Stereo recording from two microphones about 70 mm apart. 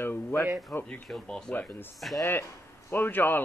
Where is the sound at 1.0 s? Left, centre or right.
Centre.